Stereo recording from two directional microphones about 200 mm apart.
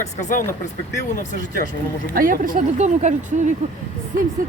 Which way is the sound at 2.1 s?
45° right (ahead or behind).